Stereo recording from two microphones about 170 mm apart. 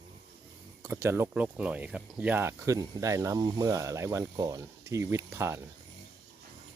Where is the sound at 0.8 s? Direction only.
15° right (ahead or behind).